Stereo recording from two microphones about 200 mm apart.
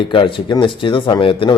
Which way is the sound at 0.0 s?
25° left (ahead or behind).